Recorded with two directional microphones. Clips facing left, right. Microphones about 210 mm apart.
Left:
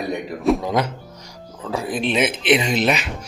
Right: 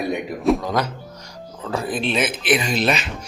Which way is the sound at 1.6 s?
10° left (ahead or behind).